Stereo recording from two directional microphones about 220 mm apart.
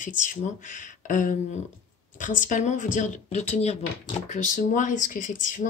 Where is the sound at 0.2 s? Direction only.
35° left (ahead or behind).